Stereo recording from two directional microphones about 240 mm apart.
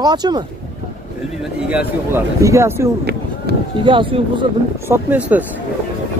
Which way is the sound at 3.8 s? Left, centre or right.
Right.